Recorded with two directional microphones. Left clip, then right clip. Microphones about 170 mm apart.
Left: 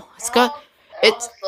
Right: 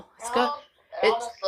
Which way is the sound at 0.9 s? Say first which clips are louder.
Left 8 dB; 35° right (ahead or behind).